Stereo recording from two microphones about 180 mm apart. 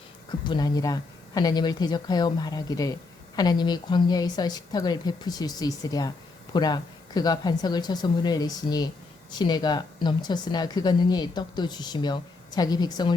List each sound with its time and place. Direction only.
0.3 s speech: 25° left (ahead or behind)